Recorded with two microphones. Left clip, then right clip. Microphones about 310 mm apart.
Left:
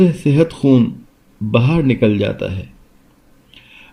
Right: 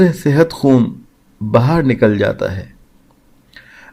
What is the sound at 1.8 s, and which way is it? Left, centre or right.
Speech, right.